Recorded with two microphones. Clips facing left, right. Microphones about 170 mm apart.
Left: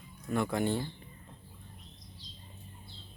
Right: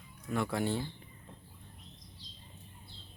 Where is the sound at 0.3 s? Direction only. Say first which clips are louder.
Left 2 dB; centre (ahead or behind).